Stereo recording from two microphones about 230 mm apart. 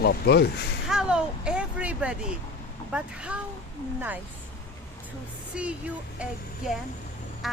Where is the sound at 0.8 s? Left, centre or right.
Centre.